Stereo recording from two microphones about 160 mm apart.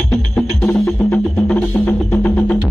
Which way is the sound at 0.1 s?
5° left (ahead or behind).